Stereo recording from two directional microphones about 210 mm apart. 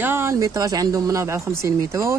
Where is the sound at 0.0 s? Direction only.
10° right (ahead or behind).